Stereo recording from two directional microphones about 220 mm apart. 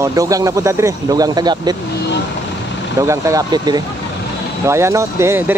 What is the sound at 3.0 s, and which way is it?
Speech, 15° right (ahead or behind).